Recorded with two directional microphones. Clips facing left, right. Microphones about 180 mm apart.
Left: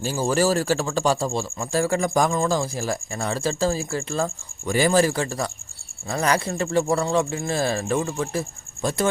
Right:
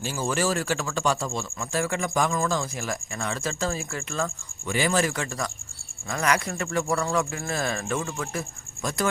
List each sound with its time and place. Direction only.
0.0 s speech: 35° left (ahead or behind)